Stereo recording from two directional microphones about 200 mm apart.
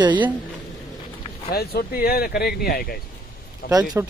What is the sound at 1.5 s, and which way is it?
Speech, 50° left (ahead or behind).